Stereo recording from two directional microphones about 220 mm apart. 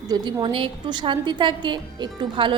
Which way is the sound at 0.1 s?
20° right (ahead or behind).